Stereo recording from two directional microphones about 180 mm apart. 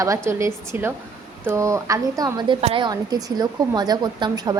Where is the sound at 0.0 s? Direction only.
15° right (ahead or behind).